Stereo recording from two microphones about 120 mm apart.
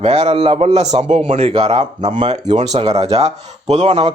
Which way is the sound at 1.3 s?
55° right (ahead or behind).